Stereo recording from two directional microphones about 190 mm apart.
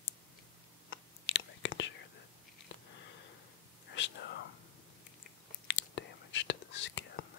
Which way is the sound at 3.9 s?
75° left (ahead or behind).